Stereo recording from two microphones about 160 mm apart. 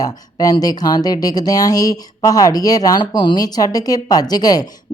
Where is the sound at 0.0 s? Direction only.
25° left (ahead or behind).